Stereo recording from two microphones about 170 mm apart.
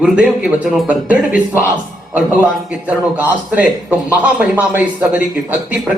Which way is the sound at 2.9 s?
10° right (ahead or behind).